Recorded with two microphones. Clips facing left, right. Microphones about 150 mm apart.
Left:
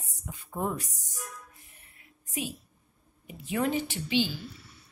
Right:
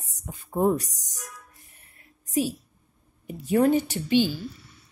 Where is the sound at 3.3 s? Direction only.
40° right (ahead or behind).